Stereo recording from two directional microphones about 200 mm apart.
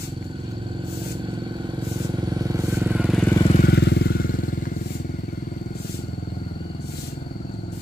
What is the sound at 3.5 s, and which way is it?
Motorcycle, 50° left (ahead or behind).